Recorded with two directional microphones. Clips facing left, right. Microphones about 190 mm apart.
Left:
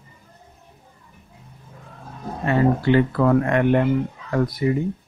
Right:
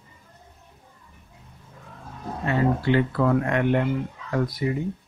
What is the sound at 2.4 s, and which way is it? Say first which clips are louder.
Speech: left 4 dB; 55° left (ahead or behind).